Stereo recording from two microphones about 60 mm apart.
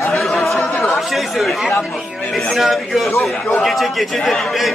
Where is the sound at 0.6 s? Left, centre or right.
Left.